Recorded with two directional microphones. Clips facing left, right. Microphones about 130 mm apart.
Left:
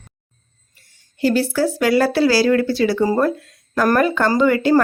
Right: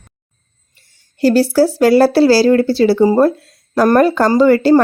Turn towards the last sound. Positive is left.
turn(degrees=-35)  # may be behind; listen again after turning